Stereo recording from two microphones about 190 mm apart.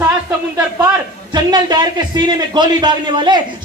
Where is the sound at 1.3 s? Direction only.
20° right (ahead or behind).